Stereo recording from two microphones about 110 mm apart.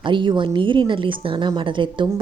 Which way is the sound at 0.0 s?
45° right (ahead or behind).